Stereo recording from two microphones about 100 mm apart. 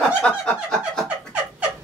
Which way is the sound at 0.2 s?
10° left (ahead or behind).